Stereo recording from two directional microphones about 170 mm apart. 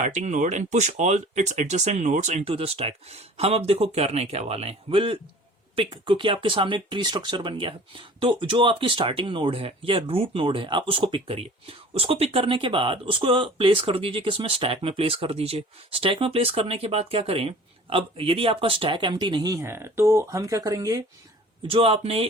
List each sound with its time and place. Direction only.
0.0 s speech: 45° right (ahead or behind); by 21.0 s 20° right (ahead or behind)
21.7 s speech: 35° right (ahead or behind)